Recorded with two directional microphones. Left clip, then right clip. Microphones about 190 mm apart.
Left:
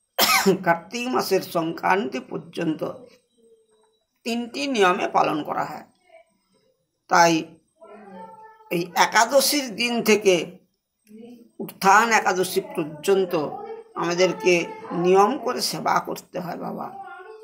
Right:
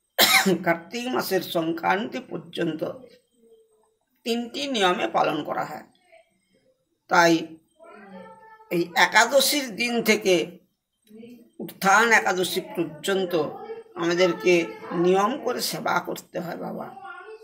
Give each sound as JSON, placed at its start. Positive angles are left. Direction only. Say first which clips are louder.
{"t": 0.2, "sound": "cough", "louder": "even", "side_deg": -15}
{"t": 0.7, "sound": "speech", "louder": "left 3 dB", "side_deg": -15}
{"t": 4.2, "sound": "speech", "louder": "even", "side_deg": -15}
{"t": 7.1, "sound": "speech", "louder": "left 1 dB", "side_deg": -15}
{"t": 8.6, "sound": "speech", "louder": "even", "side_deg": -15}
{"t": 11.8, "sound": "speech", "louder": "left 1 dB", "side_deg": -15}